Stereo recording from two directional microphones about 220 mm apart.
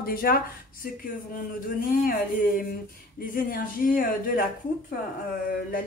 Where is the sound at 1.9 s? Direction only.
40° left (ahead or behind).